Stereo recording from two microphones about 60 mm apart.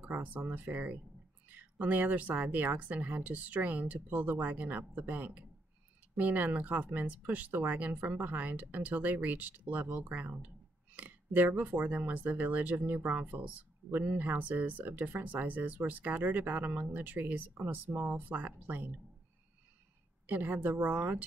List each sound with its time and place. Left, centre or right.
0.0 s speech: right
20.2 s speech: right